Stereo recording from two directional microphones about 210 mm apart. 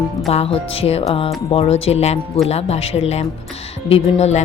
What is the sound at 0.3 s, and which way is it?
A woman's voice, 30° left (ahead or behind).